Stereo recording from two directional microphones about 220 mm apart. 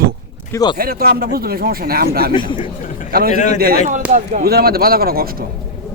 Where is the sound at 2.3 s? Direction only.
20° left (ahead or behind).